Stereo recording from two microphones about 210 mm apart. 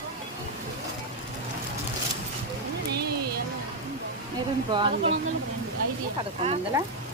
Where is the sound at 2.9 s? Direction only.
50° right (ahead or behind).